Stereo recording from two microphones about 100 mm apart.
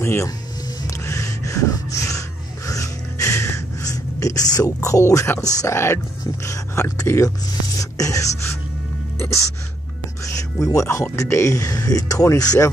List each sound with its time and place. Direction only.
0.0 s speech: 25° left (ahead or behind)
0.8 s snort: 30° left (ahead or behind)
5.6 s speech: 30° left (ahead or behind)
7.8 s a sound: 35° left (ahead or behind)
9.2 s speech: 30° left (ahead or behind)